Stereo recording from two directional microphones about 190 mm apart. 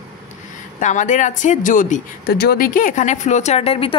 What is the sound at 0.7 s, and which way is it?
Speech, 40° left (ahead or behind).